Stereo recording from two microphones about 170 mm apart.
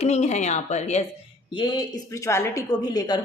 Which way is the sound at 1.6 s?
25° left (ahead or behind).